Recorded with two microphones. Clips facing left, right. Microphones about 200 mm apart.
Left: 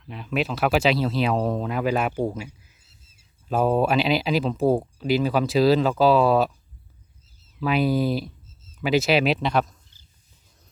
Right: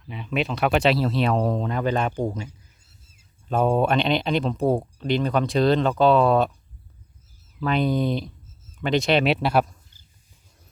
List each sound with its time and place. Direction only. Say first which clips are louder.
0.1 s speech: even; centre (ahead or behind)
3.5 s speech: even; 5° left (ahead or behind)
7.6 s speech: left 1 dB; 5° left (ahead or behind)